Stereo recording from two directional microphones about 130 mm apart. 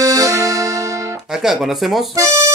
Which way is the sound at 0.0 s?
25° right (ahead or behind).